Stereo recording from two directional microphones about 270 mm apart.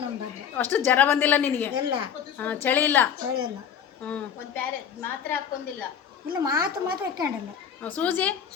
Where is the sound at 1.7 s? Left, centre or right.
Centre.